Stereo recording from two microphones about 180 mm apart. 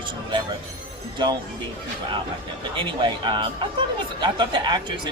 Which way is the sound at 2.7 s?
25° right (ahead or behind).